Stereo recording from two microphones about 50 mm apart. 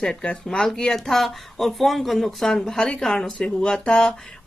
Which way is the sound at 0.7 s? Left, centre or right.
Centre.